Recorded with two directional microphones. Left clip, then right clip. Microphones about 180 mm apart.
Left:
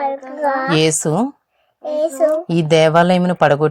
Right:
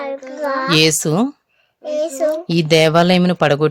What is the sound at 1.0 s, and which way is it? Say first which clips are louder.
Speech: even; 35° right (ahead or behind).